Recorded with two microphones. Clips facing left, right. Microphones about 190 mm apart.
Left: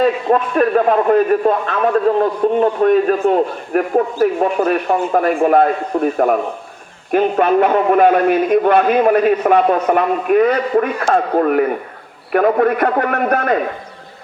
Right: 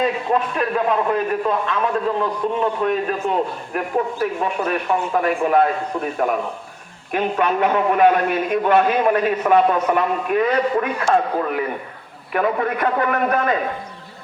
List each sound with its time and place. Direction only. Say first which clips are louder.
0.0 s a man's voice: left 5 dB; 45° left (ahead or behind)